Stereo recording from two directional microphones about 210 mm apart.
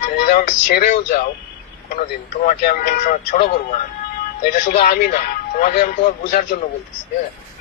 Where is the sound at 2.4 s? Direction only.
45° left (ahead or behind).